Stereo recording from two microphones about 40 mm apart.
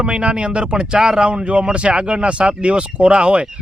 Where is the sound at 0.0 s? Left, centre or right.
Right.